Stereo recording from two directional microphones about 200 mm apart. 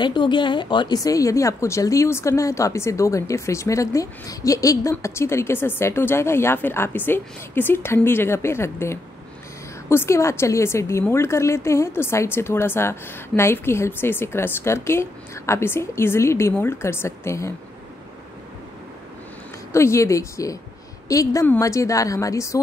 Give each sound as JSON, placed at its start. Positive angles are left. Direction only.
{"t": 0.0, "sound": "a woman's voice", "side_deg": 25}
{"t": 19.7, "sound": "a woman's voice", "side_deg": 15}